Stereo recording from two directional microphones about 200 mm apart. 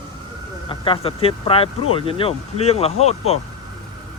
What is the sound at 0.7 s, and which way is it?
Speech, 25° left (ahead or behind).